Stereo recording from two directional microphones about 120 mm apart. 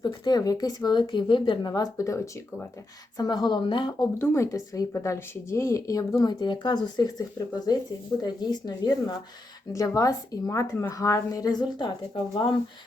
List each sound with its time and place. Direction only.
0.0 s speech: 35° left (ahead or behind)
3.2 s speech: 40° left (ahead or behind)
4.2 s a woman's voice: 25° left (ahead or behind); by 12.5 s 40° left (ahead or behind)